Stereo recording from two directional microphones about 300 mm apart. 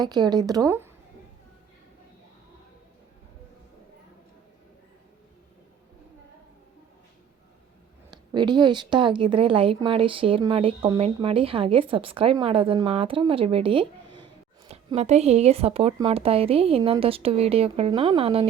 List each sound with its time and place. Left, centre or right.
0.0 s a woman's voice: centre
8.1 s a woman's voice: centre